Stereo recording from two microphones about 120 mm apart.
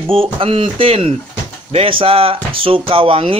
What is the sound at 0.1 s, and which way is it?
Speech, 50° right (ahead or behind).